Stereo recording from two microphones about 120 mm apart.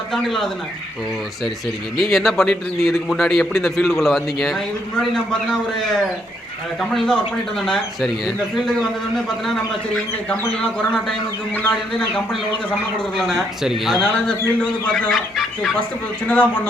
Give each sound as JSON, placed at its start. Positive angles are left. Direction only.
{"t": 0.1, "sound": "a man's voice", "side_deg": 5}
{"t": 2.0, "sound": "a man's voice", "side_deg": 0}
{"t": 6.9, "sound": "a man's voice", "side_deg": 5}
{"t": 11.5, "sound": "a man's voice", "side_deg": 15}
{"t": 13.1, "sound": "a man's voice", "side_deg": 0}
{"t": 16.2, "sound": "a man's voice", "side_deg": 15}